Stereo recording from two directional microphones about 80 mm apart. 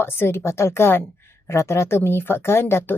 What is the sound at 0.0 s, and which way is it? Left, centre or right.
A woman's voice, left.